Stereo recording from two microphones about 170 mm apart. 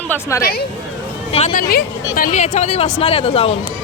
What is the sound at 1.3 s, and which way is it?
Speech, 35° left (ahead or behind).